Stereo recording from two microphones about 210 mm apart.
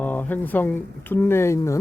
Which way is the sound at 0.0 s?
10° left (ahead or behind).